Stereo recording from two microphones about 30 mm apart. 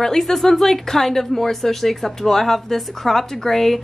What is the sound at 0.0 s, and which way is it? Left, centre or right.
Speech, centre.